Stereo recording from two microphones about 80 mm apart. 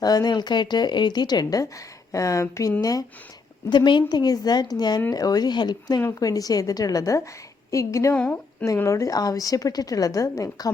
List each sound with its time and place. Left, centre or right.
0.0 s speech: left
2.1 s a woman's voice: left
3.7 s speech: left
6.1 s a woman's voice: left